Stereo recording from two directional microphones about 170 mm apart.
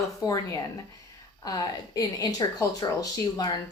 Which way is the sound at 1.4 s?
25° left (ahead or behind).